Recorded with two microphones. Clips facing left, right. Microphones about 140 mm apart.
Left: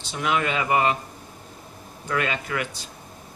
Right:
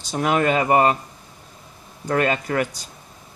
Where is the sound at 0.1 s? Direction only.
45° right (ahead or behind).